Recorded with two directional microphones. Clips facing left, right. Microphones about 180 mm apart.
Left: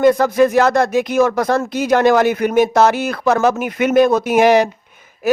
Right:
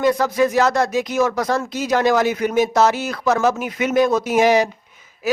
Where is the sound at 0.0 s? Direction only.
55° left (ahead or behind).